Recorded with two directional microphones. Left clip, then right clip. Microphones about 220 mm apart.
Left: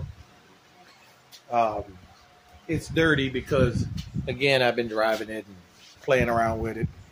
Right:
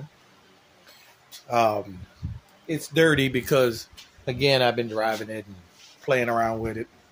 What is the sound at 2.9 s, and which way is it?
Speech, 35° right (ahead or behind).